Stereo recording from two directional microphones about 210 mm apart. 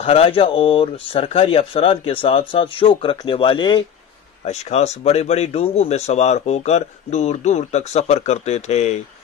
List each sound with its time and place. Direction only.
0.0 s speech: 25° left (ahead or behind)